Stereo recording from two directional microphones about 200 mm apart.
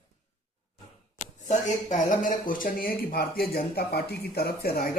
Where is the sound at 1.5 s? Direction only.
40° left (ahead or behind).